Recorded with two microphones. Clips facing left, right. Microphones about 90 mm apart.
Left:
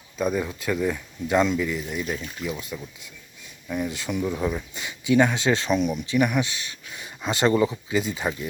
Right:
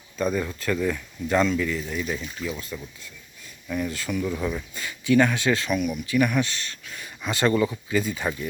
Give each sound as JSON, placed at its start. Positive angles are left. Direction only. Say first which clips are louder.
{"t": 0.2, "sound": "speech", "louder": "even", "side_deg": 10}